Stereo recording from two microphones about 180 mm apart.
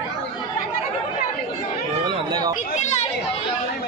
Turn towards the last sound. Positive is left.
turn(degrees=40)  # may be behind; listen again after turning